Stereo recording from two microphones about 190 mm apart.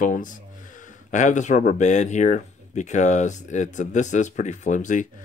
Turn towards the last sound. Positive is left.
turn(degrees=40)  # may be behind; listen again after turning